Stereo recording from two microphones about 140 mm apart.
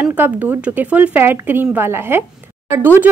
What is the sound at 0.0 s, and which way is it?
Speech, 10° right (ahead or behind).